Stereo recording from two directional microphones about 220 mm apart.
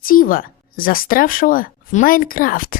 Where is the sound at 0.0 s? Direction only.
40° left (ahead or behind).